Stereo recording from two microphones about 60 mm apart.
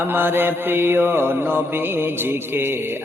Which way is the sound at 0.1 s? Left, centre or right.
Right.